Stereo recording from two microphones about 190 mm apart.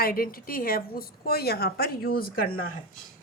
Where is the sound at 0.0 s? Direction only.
50° left (ahead or behind).